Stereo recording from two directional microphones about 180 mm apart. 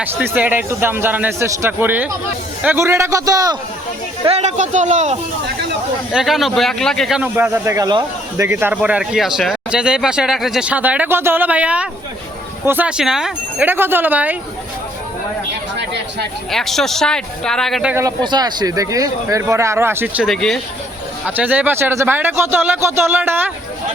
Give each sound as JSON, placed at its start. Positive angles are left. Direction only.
{"t": 0.0, "sound": "a man's voice", "side_deg": -10}
{"t": 4.2, "sound": "speech", "side_deg": -35}
{"t": 6.1, "sound": "speech", "side_deg": 0}
{"t": 7.2, "sound": "a man's voice", "side_deg": -10}
{"t": 15.8, "sound": "speech", "side_deg": -70}
{"t": 16.5, "sound": "speech", "side_deg": 0}
{"t": 17.9, "sound": "a man's voice", "side_deg": -20}
{"t": 20.2, "sound": "speech", "side_deg": 0}
{"t": 21.2, "sound": "a man's voice", "side_deg": -10}